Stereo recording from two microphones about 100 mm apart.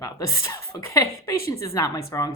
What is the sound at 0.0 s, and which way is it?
A woman's voice, 35° left (ahead or behind).